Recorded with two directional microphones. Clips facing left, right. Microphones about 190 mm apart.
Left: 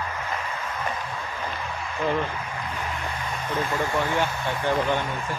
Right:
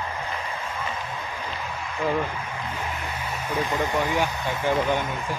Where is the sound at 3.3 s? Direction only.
10° right (ahead or behind).